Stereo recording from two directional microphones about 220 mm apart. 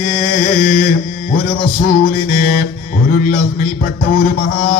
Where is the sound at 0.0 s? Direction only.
40° left (ahead or behind).